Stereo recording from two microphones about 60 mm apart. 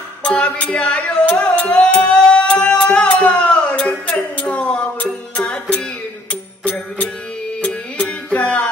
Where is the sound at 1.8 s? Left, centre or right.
Centre.